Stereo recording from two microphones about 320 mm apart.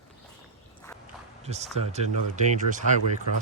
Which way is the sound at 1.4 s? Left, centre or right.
Centre.